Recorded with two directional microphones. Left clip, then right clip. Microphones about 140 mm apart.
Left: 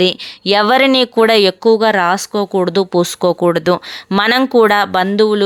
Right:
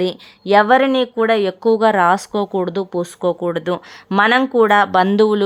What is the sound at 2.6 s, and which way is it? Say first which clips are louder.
Speech: left 7 dB; 20° left (ahead or behind).